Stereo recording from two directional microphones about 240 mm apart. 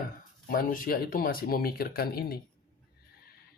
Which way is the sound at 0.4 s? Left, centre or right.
Left.